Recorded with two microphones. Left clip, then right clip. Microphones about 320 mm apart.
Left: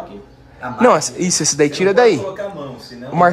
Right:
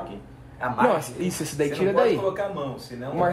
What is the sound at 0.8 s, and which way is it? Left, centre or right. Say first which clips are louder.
Speech: left 12 dB; left.